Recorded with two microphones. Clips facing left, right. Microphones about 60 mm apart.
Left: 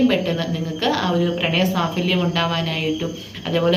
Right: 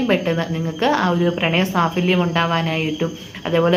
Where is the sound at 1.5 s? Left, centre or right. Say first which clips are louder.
Right 2 dB; right.